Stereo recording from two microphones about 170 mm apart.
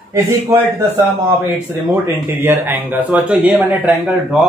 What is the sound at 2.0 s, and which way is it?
Speech, 10° right (ahead or behind).